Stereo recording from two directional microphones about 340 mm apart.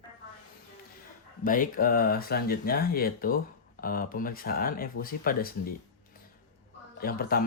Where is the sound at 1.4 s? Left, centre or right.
Left.